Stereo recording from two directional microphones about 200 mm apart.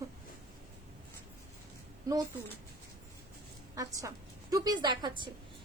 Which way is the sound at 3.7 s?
15° right (ahead or behind).